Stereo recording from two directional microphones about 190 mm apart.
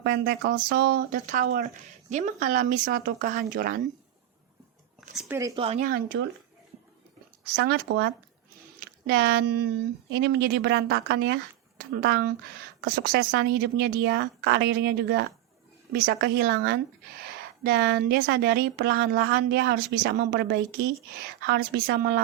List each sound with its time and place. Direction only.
0.0 s speech: 60° right (ahead or behind)
5.5 s speech: 35° right (ahead or behind)
6.1 s speech: 75° right (ahead or behind)
7.5 s speech: 60° right (ahead or behind)
9.1 s speech: 65° right (ahead or behind)